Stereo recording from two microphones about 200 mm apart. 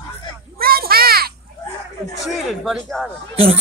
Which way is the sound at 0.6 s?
50° right (ahead or behind).